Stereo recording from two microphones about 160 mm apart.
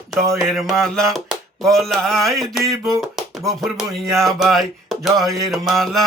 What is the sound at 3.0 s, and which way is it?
Music, centre (ahead or behind).